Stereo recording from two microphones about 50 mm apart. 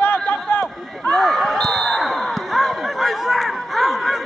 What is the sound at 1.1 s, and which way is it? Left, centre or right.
Basketball bounce, centre.